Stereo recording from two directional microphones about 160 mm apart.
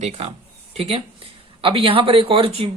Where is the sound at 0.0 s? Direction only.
40° right (ahead or behind).